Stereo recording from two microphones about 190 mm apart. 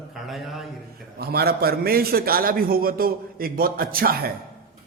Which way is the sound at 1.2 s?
55° right (ahead or behind).